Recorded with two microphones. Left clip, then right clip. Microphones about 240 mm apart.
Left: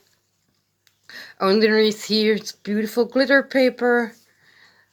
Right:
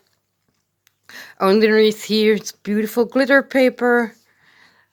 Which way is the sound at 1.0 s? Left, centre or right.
Right.